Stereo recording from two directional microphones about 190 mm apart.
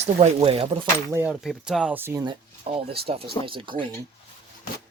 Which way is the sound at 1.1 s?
10° right (ahead or behind).